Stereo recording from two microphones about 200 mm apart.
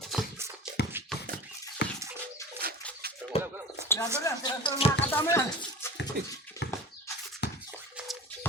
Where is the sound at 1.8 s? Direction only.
60° left (ahead or behind).